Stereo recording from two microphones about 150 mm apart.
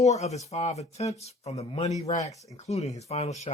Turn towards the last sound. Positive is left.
turn(degrees=45)  # may be behind; listen again after turning